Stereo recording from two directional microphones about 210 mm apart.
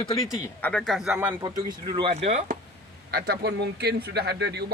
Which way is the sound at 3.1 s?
50° right (ahead or behind).